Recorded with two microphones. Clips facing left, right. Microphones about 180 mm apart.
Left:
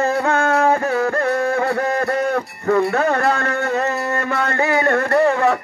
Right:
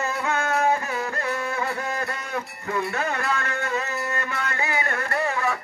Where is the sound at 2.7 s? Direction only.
55° left (ahead or behind).